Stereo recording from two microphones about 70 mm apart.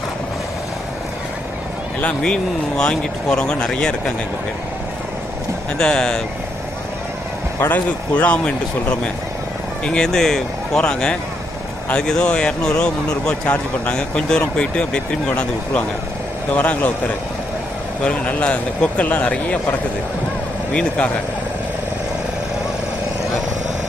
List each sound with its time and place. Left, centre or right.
2.2 s speech: centre
5.7 s speech: centre
7.6 s a man's voice: left
18.0 s speech: centre